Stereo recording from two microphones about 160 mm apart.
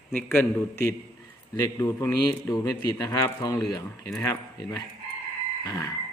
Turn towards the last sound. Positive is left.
turn(degrees=20)  # may be behind; listen again after turning